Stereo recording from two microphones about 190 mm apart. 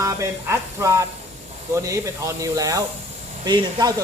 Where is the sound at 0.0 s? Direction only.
15° right (ahead or behind).